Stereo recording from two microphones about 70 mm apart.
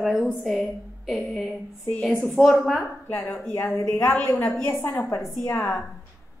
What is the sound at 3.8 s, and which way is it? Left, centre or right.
Speech, left.